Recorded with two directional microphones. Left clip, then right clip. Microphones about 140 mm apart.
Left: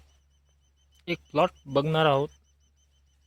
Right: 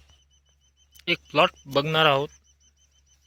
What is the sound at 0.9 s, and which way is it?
Speech, 5° left (ahead or behind).